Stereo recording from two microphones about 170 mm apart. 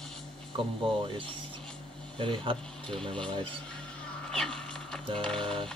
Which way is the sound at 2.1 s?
30° right (ahead or behind).